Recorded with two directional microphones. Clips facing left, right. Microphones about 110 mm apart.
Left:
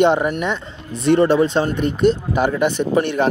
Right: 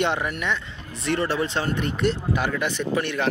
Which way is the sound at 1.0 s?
20° left (ahead or behind).